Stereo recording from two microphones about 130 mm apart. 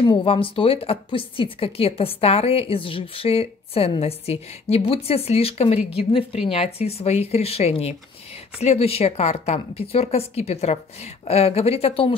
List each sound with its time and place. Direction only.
0.0 s speech: 40° left (ahead or behind)